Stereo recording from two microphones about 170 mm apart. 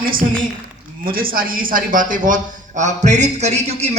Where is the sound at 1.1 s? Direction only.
60° right (ahead or behind).